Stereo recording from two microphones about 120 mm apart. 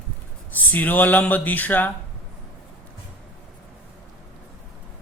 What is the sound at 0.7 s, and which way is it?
A man's voice, 15° left (ahead or behind).